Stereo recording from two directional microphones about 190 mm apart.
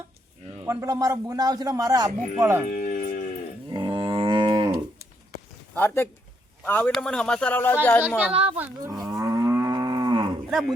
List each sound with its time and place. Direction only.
0.6 s a man's voice: 15° right (ahead or behind)
2.6 s music: 50° left (ahead or behind)
3.7 s moo: 25° right (ahead or behind)
5.7 s speech: 10° left (ahead or behind)
8.3 s speech: 30° right (ahead or behind)
8.5 s a man's voice: 10° right (ahead or behind)
8.9 s moo: 20° right (ahead or behind)
10.5 s speech: centre (ahead or behind)